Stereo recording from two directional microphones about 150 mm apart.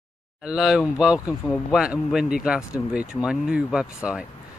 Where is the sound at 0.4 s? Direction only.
5° right (ahead or behind).